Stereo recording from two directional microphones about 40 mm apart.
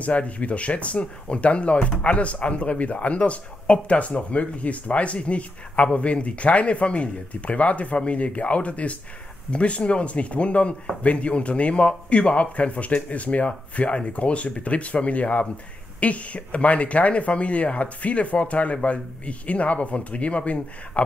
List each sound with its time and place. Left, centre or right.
0.0 s speech: left